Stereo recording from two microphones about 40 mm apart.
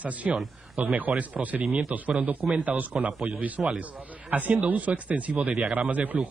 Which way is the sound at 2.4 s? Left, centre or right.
Centre.